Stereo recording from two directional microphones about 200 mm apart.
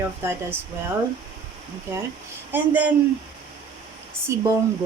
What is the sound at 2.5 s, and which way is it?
Speech, 10° right (ahead or behind).